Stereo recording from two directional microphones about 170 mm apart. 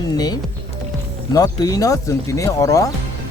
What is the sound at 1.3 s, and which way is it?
Speech, 20° left (ahead or behind).